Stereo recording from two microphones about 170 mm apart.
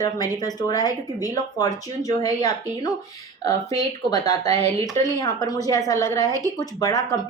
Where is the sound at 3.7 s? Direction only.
20° left (ahead or behind).